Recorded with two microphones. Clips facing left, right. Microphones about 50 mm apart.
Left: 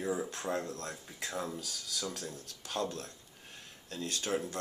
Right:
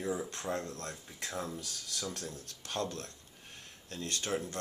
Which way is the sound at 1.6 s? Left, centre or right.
Right.